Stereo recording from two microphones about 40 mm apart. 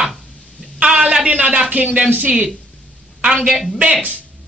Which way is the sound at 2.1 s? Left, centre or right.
Right.